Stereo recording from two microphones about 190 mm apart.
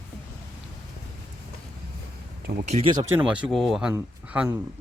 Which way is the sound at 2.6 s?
35° right (ahead or behind).